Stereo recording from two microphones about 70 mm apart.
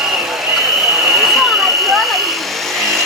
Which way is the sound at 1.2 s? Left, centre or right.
Centre.